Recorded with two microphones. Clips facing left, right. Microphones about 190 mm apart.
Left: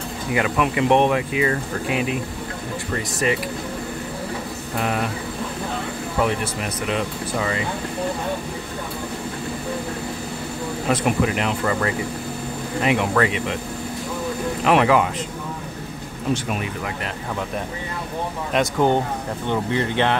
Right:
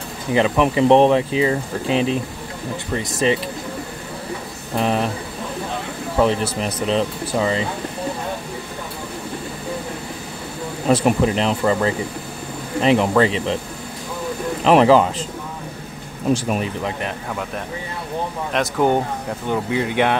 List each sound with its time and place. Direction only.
0.3 s speech: 30° right (ahead or behind)
4.7 s speech: 25° right (ahead or behind)
6.2 s speech: 30° right (ahead or behind)
10.9 s speech: 30° right (ahead or behind)
14.6 s speech: 30° right (ahead or behind)
16.6 s speech: 25° right (ahead or behind)
18.5 s speech: 5° right (ahead or behind)